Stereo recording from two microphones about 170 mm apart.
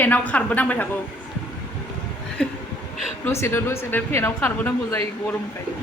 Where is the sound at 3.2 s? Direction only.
15° left (ahead or behind).